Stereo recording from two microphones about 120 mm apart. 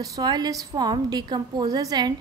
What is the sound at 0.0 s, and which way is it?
A woman's voice, 30° right (ahead or behind).